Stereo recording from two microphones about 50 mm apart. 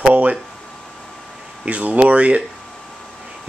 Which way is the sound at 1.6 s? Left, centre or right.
Right.